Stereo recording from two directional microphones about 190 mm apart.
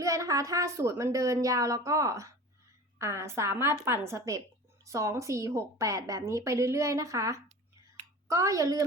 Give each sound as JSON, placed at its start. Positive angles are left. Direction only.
{"t": 0.0, "sound": "a woman's voice", "side_deg": -15}